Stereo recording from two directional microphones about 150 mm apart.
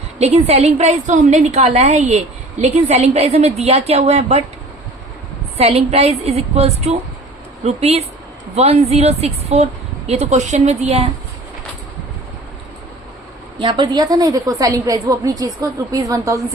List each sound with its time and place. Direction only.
0.2 s a woman's voice: 45° right (ahead or behind)
5.5 s a woman's voice: 45° right (ahead or behind)
13.6 s a woman's voice: 30° right (ahead or behind)